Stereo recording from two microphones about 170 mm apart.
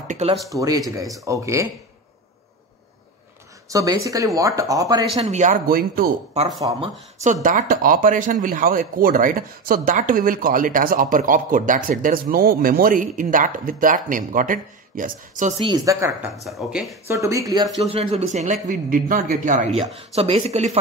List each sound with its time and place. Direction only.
0.5 s speech: 20° right (ahead or behind)
3.7 s speech: 20° right (ahead or behind)
5.3 s speech: 45° right (ahead or behind)
6.7 s speech: 25° right (ahead or behind)
7.4 s speech: 50° right (ahead or behind)
15.6 s speech: 20° right (ahead or behind)
16.4 s speech: centre (ahead or behind)
17.1 s speech: 20° right (ahead or behind)
17.8 s speech: 35° right (ahead or behind)
19.8 s speech: 35° right (ahead or behind)